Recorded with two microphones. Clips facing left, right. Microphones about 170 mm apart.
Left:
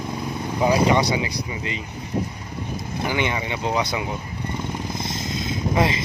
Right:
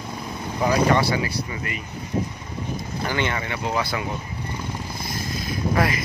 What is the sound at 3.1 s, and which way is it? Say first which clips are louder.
Speech: left 1 dB; 15° left (ahead or behind).